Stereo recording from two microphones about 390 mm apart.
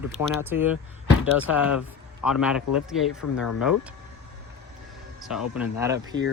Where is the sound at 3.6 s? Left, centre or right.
Centre.